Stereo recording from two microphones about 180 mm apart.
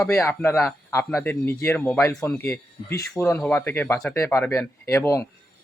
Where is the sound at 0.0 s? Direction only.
15° left (ahead or behind).